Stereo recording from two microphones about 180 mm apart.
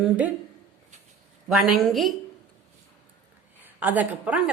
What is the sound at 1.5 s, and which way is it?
Speech, centre (ahead or behind).